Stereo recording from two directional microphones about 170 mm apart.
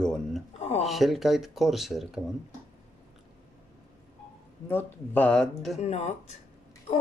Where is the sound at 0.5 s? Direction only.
40° left (ahead or behind).